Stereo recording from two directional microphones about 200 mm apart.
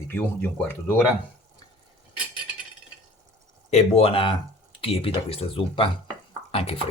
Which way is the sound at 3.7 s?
30° left (ahead or behind).